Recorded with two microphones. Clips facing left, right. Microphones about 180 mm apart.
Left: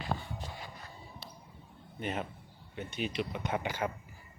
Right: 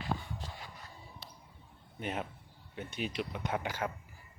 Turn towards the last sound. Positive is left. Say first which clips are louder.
# left 2 dB
turn(degrees=0)  # may be behind; listen again after turning